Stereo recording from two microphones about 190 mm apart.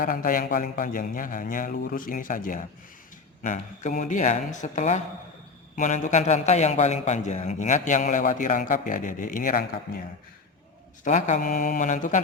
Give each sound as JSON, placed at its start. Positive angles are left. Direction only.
{"t": 0.0, "sound": "a man's voice", "side_deg": 45}
{"t": 11.0, "sound": "a man's voice", "side_deg": 40}